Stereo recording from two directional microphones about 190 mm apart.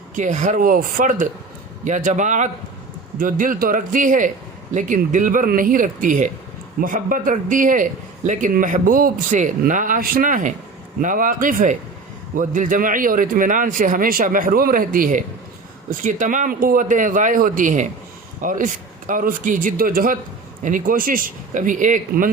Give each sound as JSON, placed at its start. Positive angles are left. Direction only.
{"t": 0.2, "sound": "a man's voice", "side_deg": -40}